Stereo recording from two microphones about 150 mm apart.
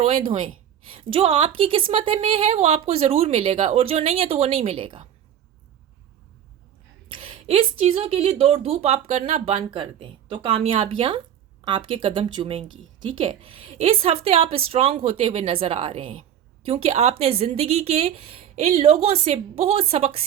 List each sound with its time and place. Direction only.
0.0 s a woman's voice: 40° right (ahead or behind)
7.1 s a sound: 35° right (ahead or behind)
7.9 s a woman's voice: 40° right (ahead or behind)